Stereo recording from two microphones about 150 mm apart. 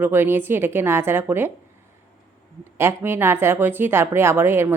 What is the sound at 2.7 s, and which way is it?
A woman's voice, 15° right (ahead or behind).